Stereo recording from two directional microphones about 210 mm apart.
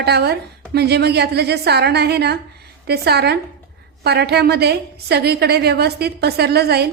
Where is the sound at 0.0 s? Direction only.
50° right (ahead or behind).